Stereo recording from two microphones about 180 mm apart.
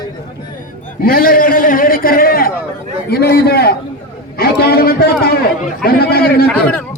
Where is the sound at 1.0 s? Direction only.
55° left (ahead or behind).